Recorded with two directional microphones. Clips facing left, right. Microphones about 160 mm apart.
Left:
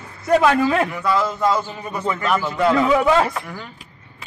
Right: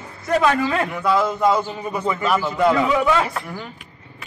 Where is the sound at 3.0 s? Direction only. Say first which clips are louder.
Left 2 dB; 35° left (ahead or behind).